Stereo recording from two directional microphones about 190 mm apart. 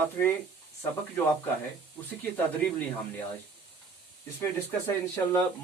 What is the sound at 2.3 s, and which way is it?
Speech, 10° left (ahead or behind).